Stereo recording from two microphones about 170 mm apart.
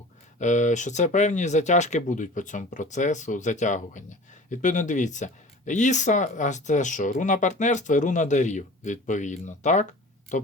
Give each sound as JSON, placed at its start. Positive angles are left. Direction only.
{"t": 0.3, "sound": "speech", "side_deg": 45}